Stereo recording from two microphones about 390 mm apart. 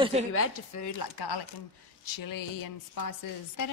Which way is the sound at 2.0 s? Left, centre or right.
Left.